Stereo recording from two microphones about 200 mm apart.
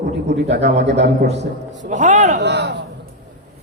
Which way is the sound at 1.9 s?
40° right (ahead or behind).